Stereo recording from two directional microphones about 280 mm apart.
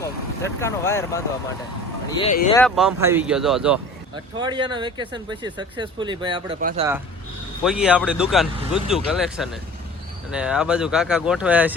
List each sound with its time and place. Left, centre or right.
0.4 s speech: centre
2.7 s speech: centre
4.4 s speech: centre
6.6 s speech: right
7.6 s speech: centre